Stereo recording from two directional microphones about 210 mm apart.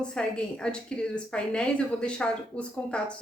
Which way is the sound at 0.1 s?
5° left (ahead or behind).